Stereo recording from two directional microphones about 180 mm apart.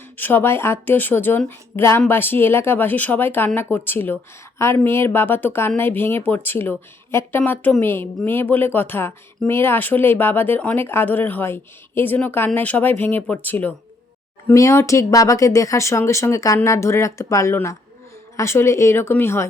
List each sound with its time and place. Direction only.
0.2 s a woman's voice: 10° left (ahead or behind)